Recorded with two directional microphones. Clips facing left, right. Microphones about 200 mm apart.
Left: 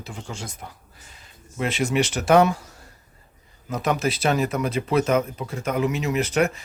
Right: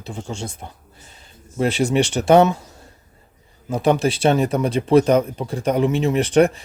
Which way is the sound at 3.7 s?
30° right (ahead or behind).